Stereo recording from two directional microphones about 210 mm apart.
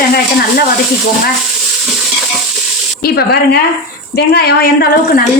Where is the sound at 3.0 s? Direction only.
50° left (ahead or behind).